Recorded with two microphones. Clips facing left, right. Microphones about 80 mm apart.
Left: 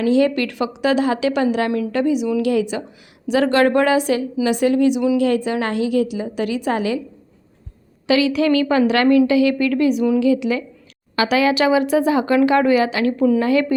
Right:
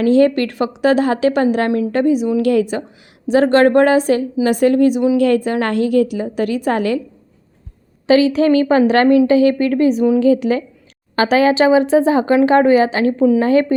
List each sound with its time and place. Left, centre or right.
0.0 s a woman's voice: right
3.2 s a woman's voice: right
8.0 s a woman's voice: right